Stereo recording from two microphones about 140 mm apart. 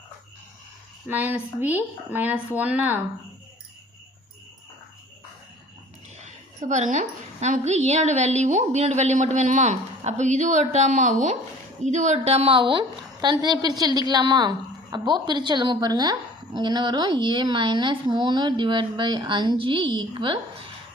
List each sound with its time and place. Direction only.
1.0 s speech: 10° right (ahead or behind)
6.1 s a sound: 55° right (ahead or behind)
7.4 s a woman's voice: 55° right (ahead or behind); by 20.7 s 40° right (ahead or behind)